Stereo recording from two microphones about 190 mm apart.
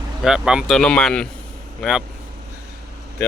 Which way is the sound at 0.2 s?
5° right (ahead or behind).